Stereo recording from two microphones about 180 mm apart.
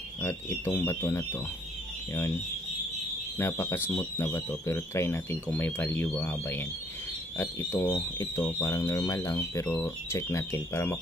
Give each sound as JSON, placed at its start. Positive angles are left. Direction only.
{"t": 0.2, "sound": "speech", "side_deg": 15}
{"t": 3.3, "sound": "speech", "side_deg": 15}